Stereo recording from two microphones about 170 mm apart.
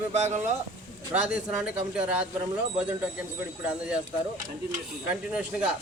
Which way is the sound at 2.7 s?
5° right (ahead or behind).